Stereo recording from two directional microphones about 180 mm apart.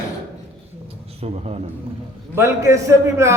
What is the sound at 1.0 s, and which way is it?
Speech, 35° right (ahead or behind).